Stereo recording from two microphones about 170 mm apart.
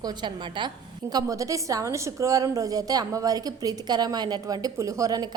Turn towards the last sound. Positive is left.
turn(degrees=-20)  # may be behind; listen again after turning